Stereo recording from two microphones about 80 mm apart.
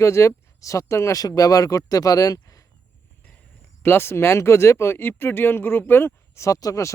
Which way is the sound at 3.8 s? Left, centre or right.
Left.